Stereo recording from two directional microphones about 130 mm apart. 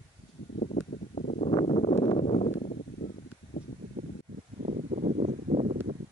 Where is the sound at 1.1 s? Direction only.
70° left (ahead or behind).